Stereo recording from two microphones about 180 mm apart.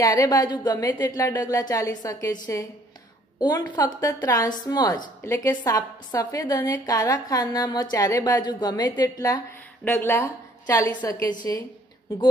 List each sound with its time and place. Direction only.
0.0 s a woman's voice: 20° left (ahead or behind)
3.3 s a woman's voice: 25° left (ahead or behind)